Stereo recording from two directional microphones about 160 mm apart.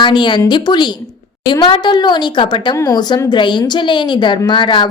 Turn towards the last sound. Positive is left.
turn(degrees=30)  # may be behind; listen again after turning